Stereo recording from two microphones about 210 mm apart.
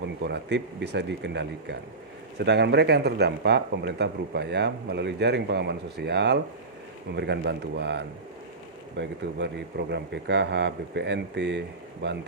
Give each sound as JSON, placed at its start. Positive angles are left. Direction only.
{"t": 0.0, "sound": "a man's voice", "side_deg": -55}